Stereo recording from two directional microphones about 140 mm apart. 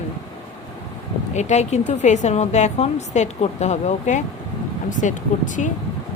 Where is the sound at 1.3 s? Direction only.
55° left (ahead or behind).